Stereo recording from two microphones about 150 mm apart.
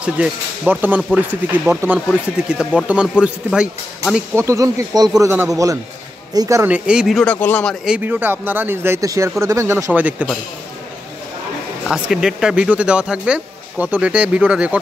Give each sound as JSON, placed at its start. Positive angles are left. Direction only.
{"t": 0.0, "sound": "speech", "side_deg": -10}
{"t": 4.4, "sound": "speech", "side_deg": -20}
{"t": 6.6, "sound": "speech", "side_deg": -10}
{"t": 7.2, "sound": "a man's voice", "side_deg": 10}
{"t": 7.8, "sound": "speech", "side_deg": -10}
{"t": 11.9, "sound": "speech", "side_deg": -5}